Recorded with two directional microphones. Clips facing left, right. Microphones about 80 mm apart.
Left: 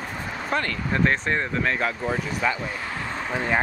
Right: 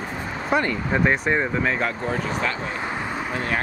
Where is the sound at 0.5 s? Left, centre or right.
Centre.